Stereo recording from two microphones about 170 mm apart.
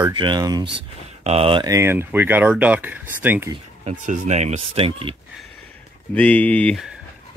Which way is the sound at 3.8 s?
40° right (ahead or behind).